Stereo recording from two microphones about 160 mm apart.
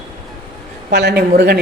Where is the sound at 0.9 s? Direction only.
85° right.